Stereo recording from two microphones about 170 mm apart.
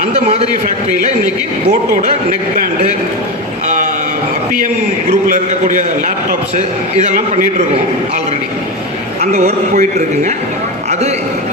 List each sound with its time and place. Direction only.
0.0 s a man's voice: 40° right (ahead or behind)
5.3 s a man's voice: 50° right (ahead or behind)
7.0 s a man's voice: 50° right (ahead or behind)
9.3 s a man's voice: 40° right (ahead or behind)